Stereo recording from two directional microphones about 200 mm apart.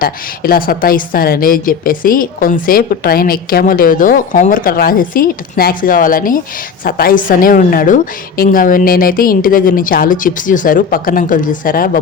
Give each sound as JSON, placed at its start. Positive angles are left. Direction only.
{"t": 0.0, "sound": "a woman's voice", "side_deg": 45}